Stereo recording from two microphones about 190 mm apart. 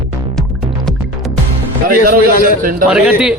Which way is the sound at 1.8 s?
50° right (ahead or behind).